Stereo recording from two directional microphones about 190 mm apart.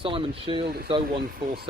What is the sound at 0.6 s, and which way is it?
Speech, 55° right (ahead or behind).